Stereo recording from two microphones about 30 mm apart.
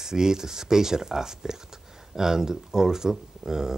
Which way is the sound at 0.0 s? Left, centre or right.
Centre.